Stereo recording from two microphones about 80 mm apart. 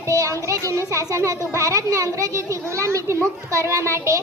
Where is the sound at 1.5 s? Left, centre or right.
Right.